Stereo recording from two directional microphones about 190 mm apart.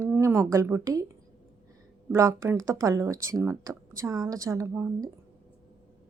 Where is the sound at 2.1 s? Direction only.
15° right (ahead or behind).